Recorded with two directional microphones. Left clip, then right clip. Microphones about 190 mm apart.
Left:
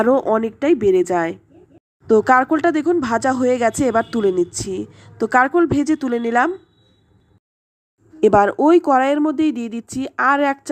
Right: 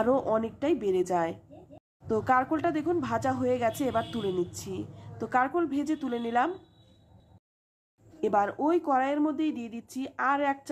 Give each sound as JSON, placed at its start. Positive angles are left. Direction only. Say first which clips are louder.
{"t": 0.0, "sound": "speech", "louder": "left 10 dB", "side_deg": 30}
{"t": 8.2, "sound": "speech", "louder": "left 13 dB", "side_deg": 40}